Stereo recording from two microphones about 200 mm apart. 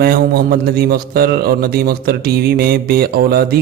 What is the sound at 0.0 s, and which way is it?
Speech, 50° right (ahead or behind).